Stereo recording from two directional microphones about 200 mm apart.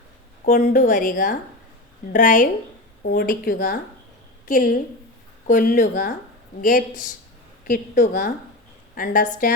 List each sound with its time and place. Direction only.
0.4 s a woman's voice: 40° left (ahead or behind)